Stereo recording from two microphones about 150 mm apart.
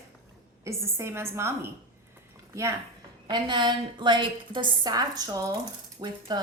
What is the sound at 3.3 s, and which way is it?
A woman's voice, 30° right (ahead or behind).